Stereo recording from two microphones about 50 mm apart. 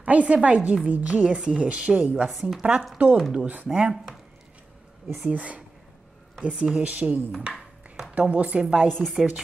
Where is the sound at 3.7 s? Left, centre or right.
Centre.